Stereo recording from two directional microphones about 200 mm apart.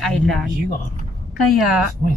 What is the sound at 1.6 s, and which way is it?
Speech, 5° right (ahead or behind).